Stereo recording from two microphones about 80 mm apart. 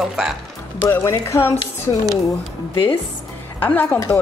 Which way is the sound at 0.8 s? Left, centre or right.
Left.